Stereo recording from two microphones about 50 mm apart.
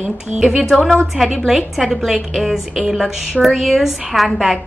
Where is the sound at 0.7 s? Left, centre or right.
Centre.